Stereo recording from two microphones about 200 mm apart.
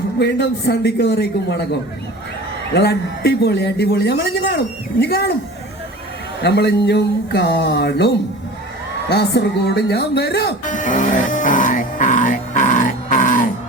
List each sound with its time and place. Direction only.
0.2 s a man's voice: 55° left (ahead or behind)
2.7 s a man's voice: 55° left (ahead or behind)
6.4 s a man's voice: 55° left (ahead or behind)
10.7 s music: 40° left (ahead or behind)